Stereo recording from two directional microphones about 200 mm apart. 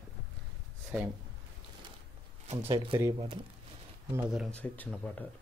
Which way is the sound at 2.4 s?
25° right (ahead or behind).